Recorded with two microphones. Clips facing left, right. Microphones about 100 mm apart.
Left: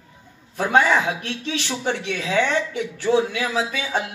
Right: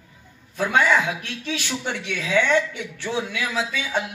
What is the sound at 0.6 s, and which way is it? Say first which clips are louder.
Speech: left 2 dB; 35° left (ahead or behind).